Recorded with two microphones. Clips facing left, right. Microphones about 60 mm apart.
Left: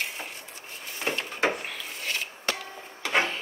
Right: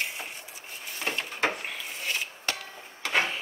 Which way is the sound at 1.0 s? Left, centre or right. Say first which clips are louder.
Left 2 dB; centre.